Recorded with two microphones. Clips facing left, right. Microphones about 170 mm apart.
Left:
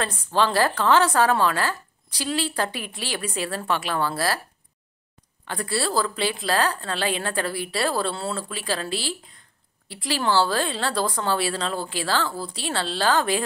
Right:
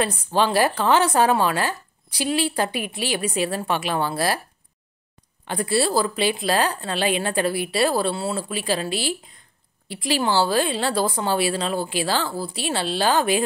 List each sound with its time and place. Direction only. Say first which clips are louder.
0.0 s a woman's voice: right 2 dB; 15° right (ahead or behind)
5.4 s a woman's voice: right 5 dB; 20° right (ahead or behind)